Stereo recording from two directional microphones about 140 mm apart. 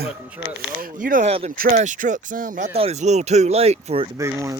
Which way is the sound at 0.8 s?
80° right.